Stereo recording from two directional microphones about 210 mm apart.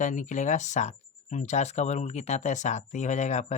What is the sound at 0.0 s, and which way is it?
Speech, 35° left (ahead or behind).